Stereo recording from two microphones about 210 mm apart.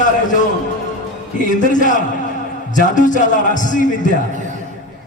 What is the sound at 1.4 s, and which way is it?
A man's voice, 35° left (ahead or behind).